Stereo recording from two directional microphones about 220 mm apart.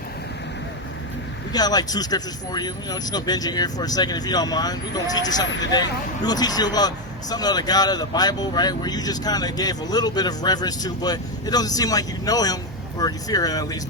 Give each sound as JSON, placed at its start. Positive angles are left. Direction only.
{"t": 1.5, "sound": "speech", "side_deg": 20}